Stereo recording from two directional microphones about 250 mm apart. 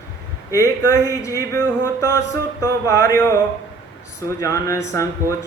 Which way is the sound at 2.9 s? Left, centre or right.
Centre.